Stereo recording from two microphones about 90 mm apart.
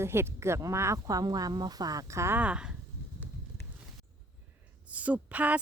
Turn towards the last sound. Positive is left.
turn(degrees=-15)  # may be behind; listen again after turning